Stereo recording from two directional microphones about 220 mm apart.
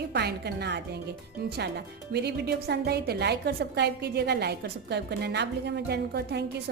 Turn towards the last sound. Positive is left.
turn(degrees=-50)  # may be behind; listen again after turning